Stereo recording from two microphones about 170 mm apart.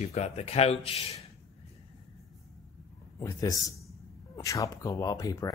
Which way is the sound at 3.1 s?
20° left (ahead or behind).